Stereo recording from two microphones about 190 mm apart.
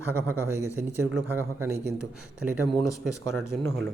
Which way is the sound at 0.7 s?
10° right (ahead or behind).